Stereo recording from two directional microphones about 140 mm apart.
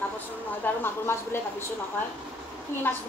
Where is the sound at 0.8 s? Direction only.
15° left (ahead or behind).